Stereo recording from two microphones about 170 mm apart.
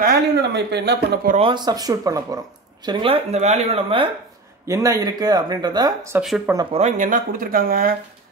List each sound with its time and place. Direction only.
0.0 s speech: 75° right (ahead or behind)
1.4 s speech: 25° right (ahead or behind)
4.6 s speech: 20° right (ahead or behind)
6.7 s speech: 45° right (ahead or behind)